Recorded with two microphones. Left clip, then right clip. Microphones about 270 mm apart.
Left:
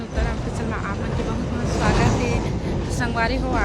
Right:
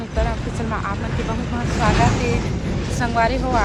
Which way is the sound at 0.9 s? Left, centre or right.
Left.